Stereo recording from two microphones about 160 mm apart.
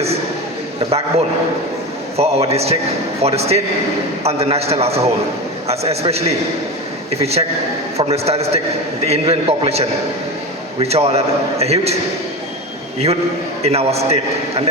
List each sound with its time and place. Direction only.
2.1 s a man's voice: 40° right (ahead or behind)
13.6 s a man's voice: 40° right (ahead or behind)